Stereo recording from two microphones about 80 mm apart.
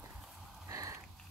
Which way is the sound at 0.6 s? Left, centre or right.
Right.